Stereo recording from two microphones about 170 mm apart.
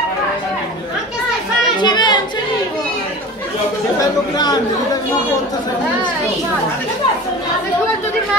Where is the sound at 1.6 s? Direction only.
25° left (ahead or behind).